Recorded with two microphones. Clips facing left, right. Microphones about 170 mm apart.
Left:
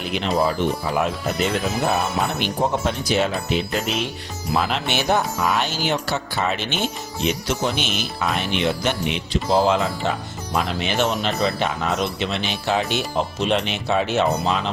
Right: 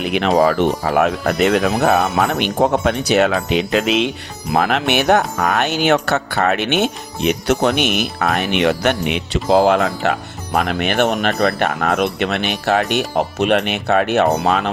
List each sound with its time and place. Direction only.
0.0 s speech: 60° right (ahead or behind); by 2.4 s 85° right
2.6 s speech: 55° right (ahead or behind); by 4.1 s 85° right
4.5 s speech: 60° right (ahead or behind)